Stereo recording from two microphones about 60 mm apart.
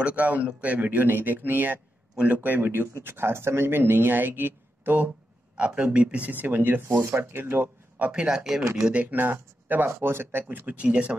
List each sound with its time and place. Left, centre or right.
0.0 s a man's voice: right
5.8 s a man's voice: centre; by 8.1 s right
8.1 s speech: centre
8.9 s a man's voice: right
9.8 s speech: right
10.5 s a man's voice: right